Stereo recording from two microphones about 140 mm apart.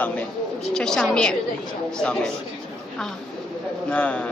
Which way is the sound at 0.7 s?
5° left (ahead or behind).